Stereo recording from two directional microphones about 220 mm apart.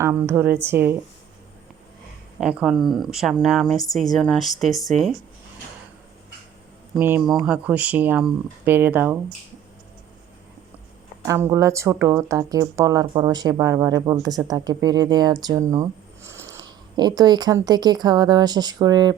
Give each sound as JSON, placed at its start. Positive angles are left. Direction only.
{"t": 0.0, "sound": "speech", "side_deg": -10}
{"t": 2.4, "sound": "speech", "side_deg": -5}
{"t": 7.0, "sound": "speech", "side_deg": -10}
{"t": 11.3, "sound": "speech", "side_deg": -10}